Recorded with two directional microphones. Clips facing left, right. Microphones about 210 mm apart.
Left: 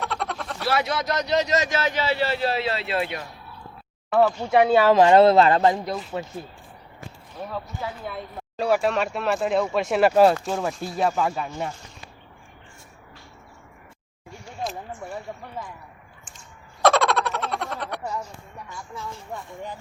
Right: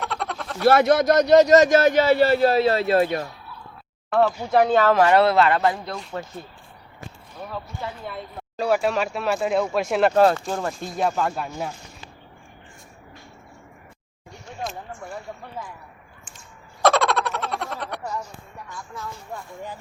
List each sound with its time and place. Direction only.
0.0 s a sound: centre (ahead or behind)
0.7 s a man's voice: 50° right (ahead or behind)
4.1 s speech: centre (ahead or behind); by 6.0 s 20° left (ahead or behind)
6.0 s speech: 5° left (ahead or behind)
7.8 s speech: 5° left (ahead or behind)
14.6 s a sound: centre (ahead or behind)
16.8 s frog: centre (ahead or behind)
19.3 s speech: centre (ahead or behind)